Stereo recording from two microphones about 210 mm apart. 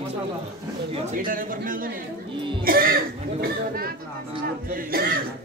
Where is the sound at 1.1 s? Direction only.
40° right (ahead or behind).